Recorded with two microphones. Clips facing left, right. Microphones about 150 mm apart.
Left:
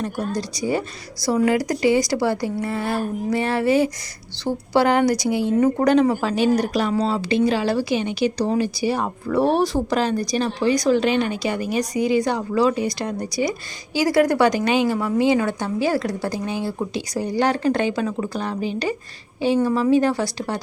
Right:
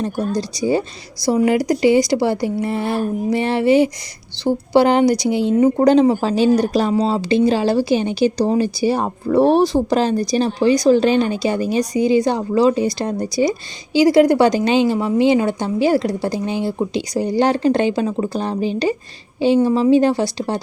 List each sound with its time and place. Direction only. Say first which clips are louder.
0.0 s a woman's voice: right 4 dB; 30° right (ahead or behind)